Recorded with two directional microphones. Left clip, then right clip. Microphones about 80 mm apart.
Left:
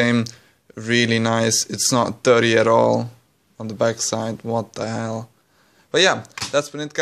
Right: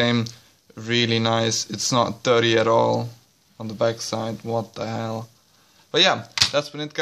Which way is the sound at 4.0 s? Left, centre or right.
Left.